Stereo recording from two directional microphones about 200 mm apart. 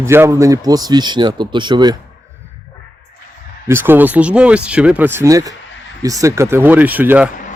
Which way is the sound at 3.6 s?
10° right (ahead or behind).